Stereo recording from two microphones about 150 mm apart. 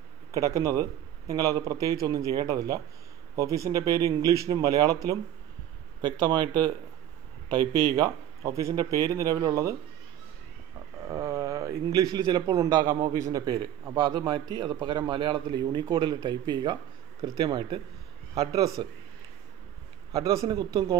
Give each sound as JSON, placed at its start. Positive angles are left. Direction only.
{"t": 0.3, "sound": "speech", "side_deg": -20}
{"t": 5.9, "sound": "speech", "side_deg": -25}
{"t": 11.1, "sound": "a man's voice", "side_deg": -25}
{"t": 20.1, "sound": "speech", "side_deg": -25}